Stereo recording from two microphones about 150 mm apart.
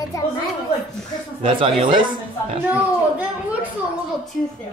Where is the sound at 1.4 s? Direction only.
35° right (ahead or behind).